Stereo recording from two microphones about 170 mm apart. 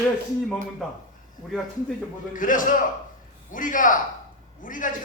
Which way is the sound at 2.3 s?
50° left (ahead or behind).